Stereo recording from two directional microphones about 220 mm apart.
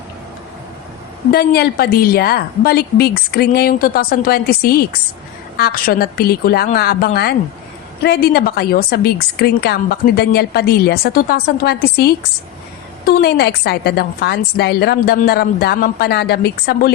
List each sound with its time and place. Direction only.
1.3 s a woman's voice: 45° left (ahead or behind)
13.1 s a woman's voice: 45° left (ahead or behind)